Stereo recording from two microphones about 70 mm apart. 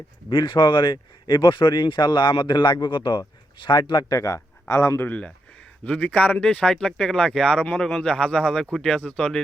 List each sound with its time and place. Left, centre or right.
0.3 s speech: left
4.7 s speech: left
4.9 s speech: left
5.8 s speech: centre